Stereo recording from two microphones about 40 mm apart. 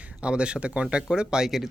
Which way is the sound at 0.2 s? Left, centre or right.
Right.